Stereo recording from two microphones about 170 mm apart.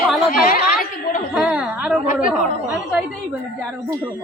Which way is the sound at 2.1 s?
5° right (ahead or behind).